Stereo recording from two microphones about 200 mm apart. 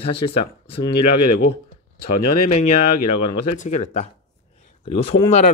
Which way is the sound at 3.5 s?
35° left (ahead or behind).